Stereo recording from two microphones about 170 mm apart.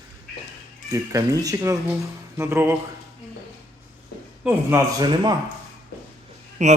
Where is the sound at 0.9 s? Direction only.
20° right (ahead or behind).